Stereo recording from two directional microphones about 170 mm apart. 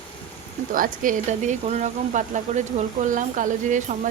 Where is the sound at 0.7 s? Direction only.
55° right (ahead or behind).